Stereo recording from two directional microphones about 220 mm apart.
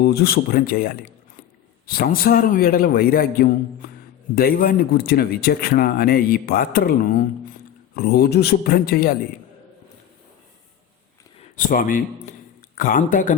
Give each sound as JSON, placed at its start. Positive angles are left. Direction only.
{"t": 0.0, "sound": "a man's voice", "side_deg": 45}
{"t": 11.5, "sound": "a man's voice", "side_deg": 40}